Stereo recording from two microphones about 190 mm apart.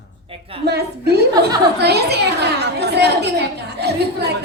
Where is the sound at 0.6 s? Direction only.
60° right (ahead or behind).